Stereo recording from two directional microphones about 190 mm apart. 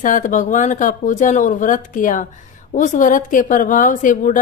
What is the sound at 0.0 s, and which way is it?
A woman's voice, 40° left (ahead or behind).